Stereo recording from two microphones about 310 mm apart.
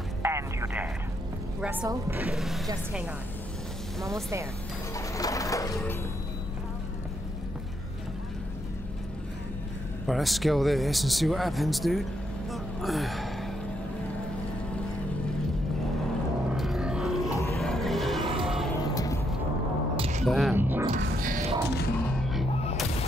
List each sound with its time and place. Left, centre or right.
0.2 s a sound: centre
1.6 s speech: centre
4.9 s a sound: centre
10.0 s speech: centre
16.5 s music: centre
20.0 s single-lens reflex camera: right
20.2 s music: centre
20.9 s music: right
21.4 s music: centre